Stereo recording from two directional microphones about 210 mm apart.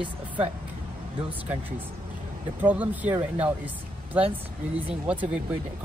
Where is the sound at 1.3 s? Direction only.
10° right (ahead or behind).